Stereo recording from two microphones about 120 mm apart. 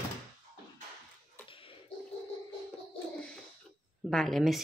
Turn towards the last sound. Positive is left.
turn(degrees=0)  # may be behind; listen again after turning